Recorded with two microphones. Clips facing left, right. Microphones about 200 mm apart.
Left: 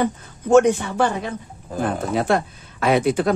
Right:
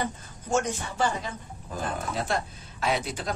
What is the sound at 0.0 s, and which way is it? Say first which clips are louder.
Speech: left 10 dB; 60° left (ahead or behind).